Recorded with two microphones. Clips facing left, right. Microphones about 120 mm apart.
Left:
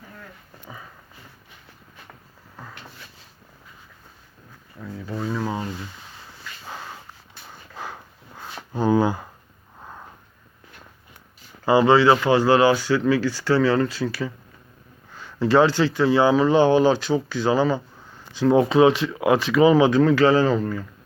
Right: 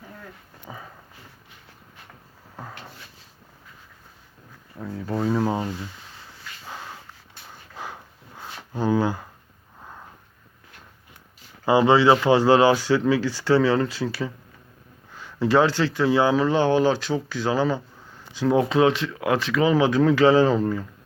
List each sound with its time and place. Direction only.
5.0 s speech: 40° right (ahead or behind)
6.7 s snort: 10° left (ahead or behind)
8.7 s speech: 5° left (ahead or behind)
11.6 s speech: 20° right (ahead or behind)
15.1 s speech: 10° right (ahead or behind)
16.4 s speech: 5° left (ahead or behind)
20.0 s speech: 15° right (ahead or behind)